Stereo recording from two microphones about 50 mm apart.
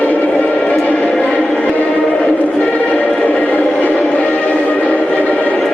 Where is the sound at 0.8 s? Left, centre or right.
Left.